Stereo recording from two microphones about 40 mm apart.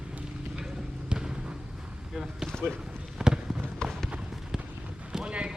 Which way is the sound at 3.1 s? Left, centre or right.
Centre.